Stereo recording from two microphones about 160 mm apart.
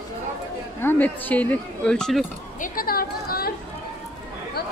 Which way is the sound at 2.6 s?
60° left (ahead or behind).